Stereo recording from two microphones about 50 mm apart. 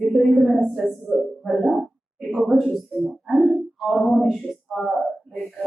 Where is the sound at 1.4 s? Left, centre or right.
Centre.